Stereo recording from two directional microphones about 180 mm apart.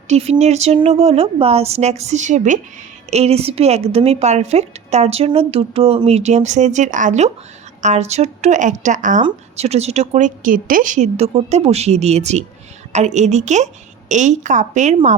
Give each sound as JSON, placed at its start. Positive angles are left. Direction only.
{"t": 0.1, "sound": "a woman's voice", "side_deg": -35}